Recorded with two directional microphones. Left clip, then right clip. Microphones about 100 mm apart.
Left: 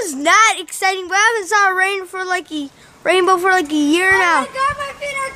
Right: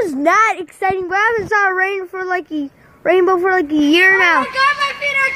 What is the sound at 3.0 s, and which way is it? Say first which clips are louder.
Speech: even; 15° left (ahead or behind).